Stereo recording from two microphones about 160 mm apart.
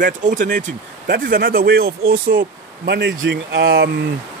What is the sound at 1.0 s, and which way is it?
Speech, 65° right (ahead or behind).